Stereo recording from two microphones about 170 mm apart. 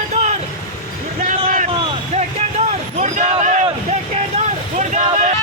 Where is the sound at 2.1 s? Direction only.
40° right (ahead or behind).